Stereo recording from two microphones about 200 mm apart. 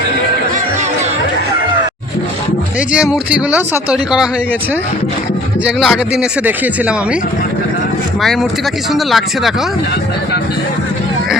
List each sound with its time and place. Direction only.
2.9 s speech: 5° right (ahead or behind)
5.6 s speech: 5° right (ahead or behind)
8.2 s speech: centre (ahead or behind)